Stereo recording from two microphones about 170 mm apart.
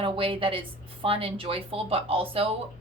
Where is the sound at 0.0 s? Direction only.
30° right (ahead or behind).